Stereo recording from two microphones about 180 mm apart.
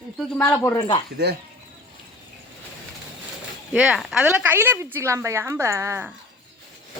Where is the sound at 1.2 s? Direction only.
65° right (ahead or behind).